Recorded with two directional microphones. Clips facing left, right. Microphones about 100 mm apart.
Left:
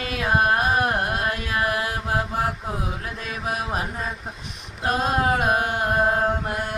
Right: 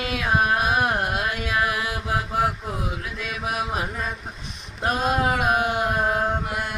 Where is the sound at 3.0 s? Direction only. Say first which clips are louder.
Even; 40° left (ahead or behind).